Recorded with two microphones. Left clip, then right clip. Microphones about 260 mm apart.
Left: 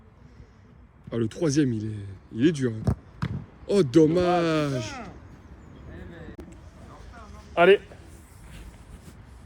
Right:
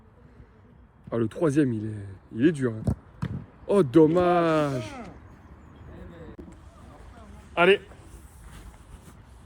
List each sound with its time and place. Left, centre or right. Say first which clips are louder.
1.1 s speech: right 1 dB; centre
3.7 s speech: right 1 dB; centre
5.9 s a sound: left 1 dB; centre
7.5 s a man's voice: left 2 dB; right